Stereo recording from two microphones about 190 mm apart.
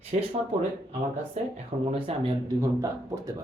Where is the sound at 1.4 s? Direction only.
35° right (ahead or behind).